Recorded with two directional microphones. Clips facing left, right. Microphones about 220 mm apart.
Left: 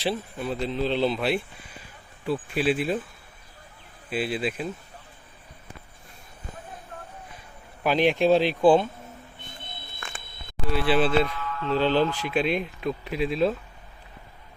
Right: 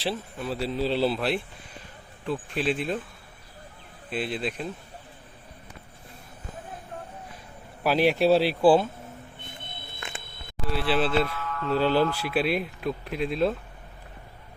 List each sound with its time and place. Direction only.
0.0 s speech: centre (ahead or behind)
4.1 s speech: 5° left (ahead or behind)
7.9 s speech: 5° right (ahead or behind)
10.7 s speech: centre (ahead or behind)
11.3 s music: 40° right (ahead or behind)
11.7 s speech: 10° right (ahead or behind)